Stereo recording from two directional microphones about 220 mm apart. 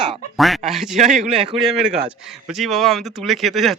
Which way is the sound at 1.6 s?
Centre (ahead or behind).